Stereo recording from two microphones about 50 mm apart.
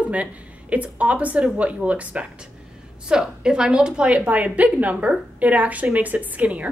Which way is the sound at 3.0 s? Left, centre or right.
Centre.